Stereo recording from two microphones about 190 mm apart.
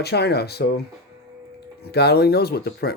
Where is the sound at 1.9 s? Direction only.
60° left (ahead or behind).